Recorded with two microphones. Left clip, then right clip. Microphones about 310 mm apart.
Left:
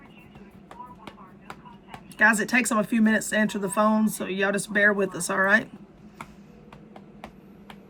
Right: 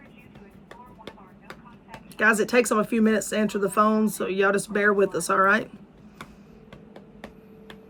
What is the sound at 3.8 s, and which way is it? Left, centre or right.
Speech, centre.